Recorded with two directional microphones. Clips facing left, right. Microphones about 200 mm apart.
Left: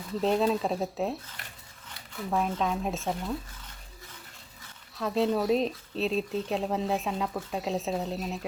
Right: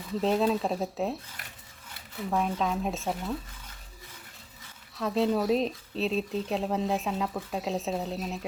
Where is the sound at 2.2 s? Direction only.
Centre (ahead or behind).